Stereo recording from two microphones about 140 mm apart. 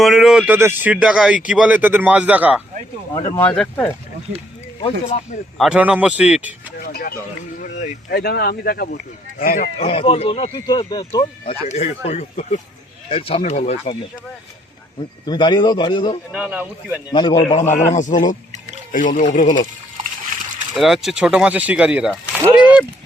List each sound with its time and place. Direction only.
0.0 s a man's voice: 5° right (ahead or behind)
3.3 s speech: 10° left (ahead or behind)
5.5 s a man's voice: 5° right (ahead or behind)
6.7 s speech: 90° left
9.7 s speech: 45° left (ahead or behind); by 11.3 s 30° left (ahead or behind)
11.4 s speech: 50° left (ahead or behind)
13.1 s speech: 40° left (ahead or behind)
15.3 s a man's voice: 30° left (ahead or behind)
16.3 s a man's voice: 10° right (ahead or behind)
17.1 s a man's voice: 30° left (ahead or behind)
17.6 s a man's voice: 60° left (ahead or behind)
20.7 s a man's voice: centre (ahead or behind)
22.5 s a sound: 10° right (ahead or behind)